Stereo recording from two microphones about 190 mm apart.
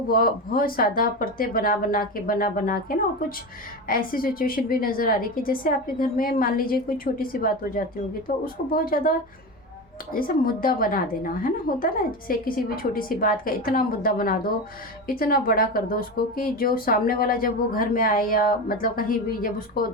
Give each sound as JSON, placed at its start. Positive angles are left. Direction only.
{"t": 0.1, "sound": "speech", "side_deg": 50}